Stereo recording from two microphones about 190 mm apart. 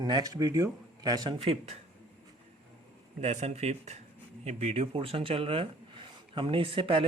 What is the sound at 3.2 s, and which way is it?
Speech, 35° right (ahead or behind).